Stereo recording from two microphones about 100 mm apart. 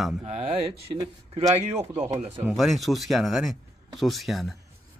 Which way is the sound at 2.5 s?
Centre (ahead or behind).